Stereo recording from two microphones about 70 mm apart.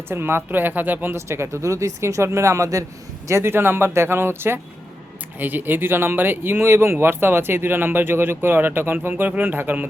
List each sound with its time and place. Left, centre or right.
0.1 s speech: right
1.1 s speech: right